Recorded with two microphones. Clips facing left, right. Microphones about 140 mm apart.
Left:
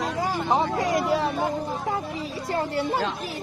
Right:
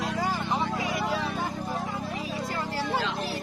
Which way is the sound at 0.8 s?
75° left (ahead or behind).